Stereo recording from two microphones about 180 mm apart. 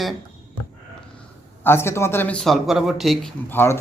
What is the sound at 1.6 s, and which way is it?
Speech, 15° left (ahead or behind).